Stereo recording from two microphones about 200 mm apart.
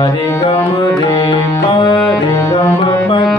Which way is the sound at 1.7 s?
25° left (ahead or behind).